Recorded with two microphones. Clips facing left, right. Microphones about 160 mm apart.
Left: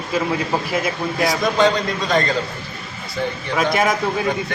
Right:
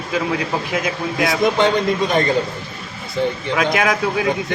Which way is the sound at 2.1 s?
20° right (ahead or behind).